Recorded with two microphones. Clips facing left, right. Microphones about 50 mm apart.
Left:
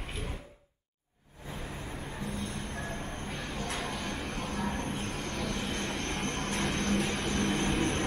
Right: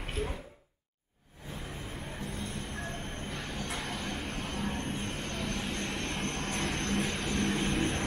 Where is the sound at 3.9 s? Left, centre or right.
Left.